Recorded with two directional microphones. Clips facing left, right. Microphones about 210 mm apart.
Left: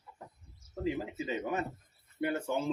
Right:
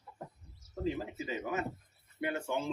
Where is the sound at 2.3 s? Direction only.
40° left (ahead or behind).